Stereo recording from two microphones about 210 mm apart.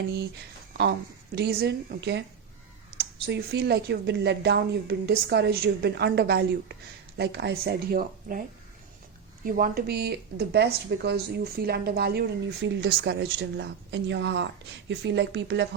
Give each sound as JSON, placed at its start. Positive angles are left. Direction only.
{"t": 1.4, "sound": "a woman's voice", "side_deg": -50}